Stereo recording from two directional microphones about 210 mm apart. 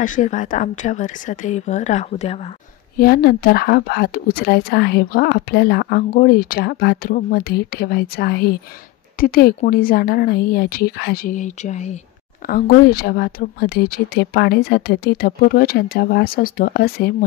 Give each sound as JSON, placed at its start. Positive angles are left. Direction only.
{"t": 0.0, "sound": "speech", "side_deg": 40}
{"t": 3.0, "sound": "speech", "side_deg": 50}
{"t": 11.3, "sound": "speech", "side_deg": 35}
{"t": 12.4, "sound": "speech", "side_deg": 45}